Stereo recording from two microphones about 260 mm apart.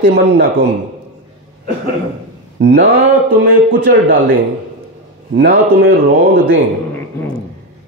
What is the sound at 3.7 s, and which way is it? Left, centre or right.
A man's voice, right.